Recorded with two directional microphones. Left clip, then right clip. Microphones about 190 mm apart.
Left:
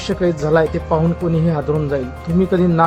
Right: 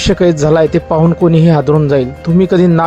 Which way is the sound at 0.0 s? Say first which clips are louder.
Right 8 dB; 30° right (ahead or behind).